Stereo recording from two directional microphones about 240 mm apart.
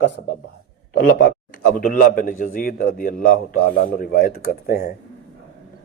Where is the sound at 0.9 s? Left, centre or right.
Left.